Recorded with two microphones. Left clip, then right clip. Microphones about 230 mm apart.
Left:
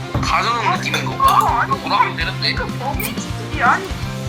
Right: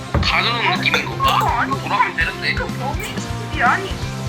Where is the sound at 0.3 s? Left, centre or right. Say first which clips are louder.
Left 1 dB; centre.